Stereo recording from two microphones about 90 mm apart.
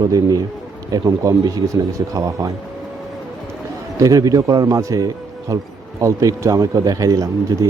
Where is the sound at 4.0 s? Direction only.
45° right (ahead or behind).